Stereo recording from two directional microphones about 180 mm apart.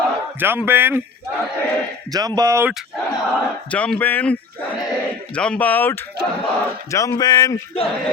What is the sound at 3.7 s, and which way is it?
Speech, 5° left (ahead or behind).